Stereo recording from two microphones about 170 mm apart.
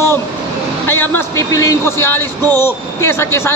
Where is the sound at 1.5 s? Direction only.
20° left (ahead or behind).